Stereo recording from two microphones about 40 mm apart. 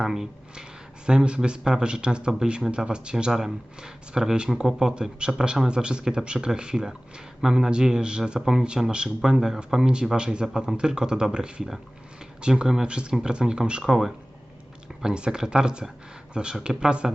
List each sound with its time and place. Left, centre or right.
0.0 s speech: centre
13.8 s speech: centre
15.0 s speech: right